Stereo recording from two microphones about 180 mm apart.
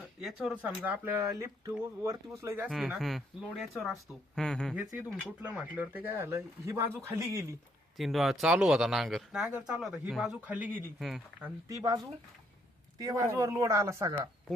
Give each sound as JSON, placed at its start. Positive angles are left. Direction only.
{"t": 0.2, "sound": "speech", "side_deg": 0}
{"t": 2.6, "sound": "speech", "side_deg": 0}
{"t": 7.9, "sound": "speech", "side_deg": 0}
{"t": 11.7, "sound": "speech", "side_deg": -20}